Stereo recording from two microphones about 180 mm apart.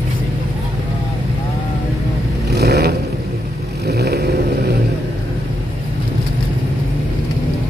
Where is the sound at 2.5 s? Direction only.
60° right (ahead or behind).